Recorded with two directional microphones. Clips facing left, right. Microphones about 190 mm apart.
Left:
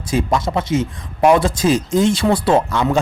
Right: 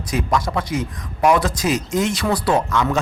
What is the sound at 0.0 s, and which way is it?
Speech, 25° left (ahead or behind).